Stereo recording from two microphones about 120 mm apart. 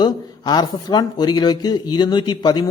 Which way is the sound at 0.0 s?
35° left (ahead or behind).